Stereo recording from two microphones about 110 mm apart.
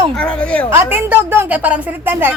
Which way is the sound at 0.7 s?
20° right (ahead or behind).